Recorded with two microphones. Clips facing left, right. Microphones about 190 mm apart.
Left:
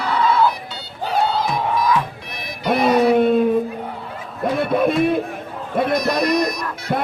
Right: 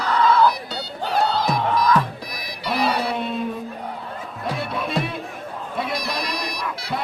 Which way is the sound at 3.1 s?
50° left (ahead or behind).